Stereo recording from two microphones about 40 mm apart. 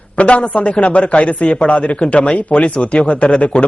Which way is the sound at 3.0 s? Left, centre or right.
Left.